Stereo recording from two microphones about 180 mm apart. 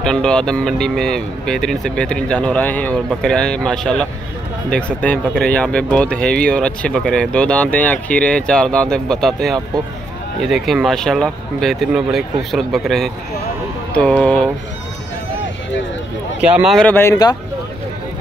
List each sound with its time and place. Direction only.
0.0 s speech: 5° left (ahead or behind)
16.3 s speech: 5° right (ahead or behind); by 17.4 s 20° left (ahead or behind)